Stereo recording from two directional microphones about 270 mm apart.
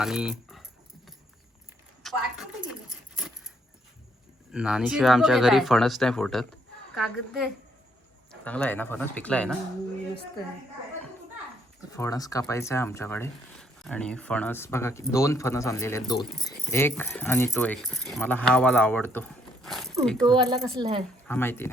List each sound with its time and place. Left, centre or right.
0.0 s speech: centre
2.0 s a sound: centre
4.5 s speech: centre
8.4 s speech: centre
11.9 s speech: centre
20.2 s a woman's voice: centre
21.2 s speech: centre